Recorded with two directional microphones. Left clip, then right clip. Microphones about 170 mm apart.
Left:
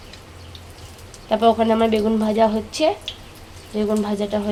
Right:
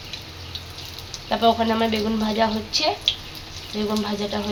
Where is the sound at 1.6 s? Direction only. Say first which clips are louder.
Left 4 dB; 75° left (ahead or behind).